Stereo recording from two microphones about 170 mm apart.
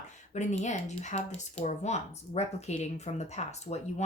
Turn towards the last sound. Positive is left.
turn(degrees=40)  # may be behind; listen again after turning